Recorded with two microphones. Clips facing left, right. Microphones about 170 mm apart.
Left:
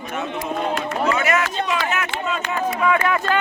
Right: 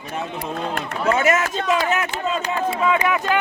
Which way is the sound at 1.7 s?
35° right (ahead or behind).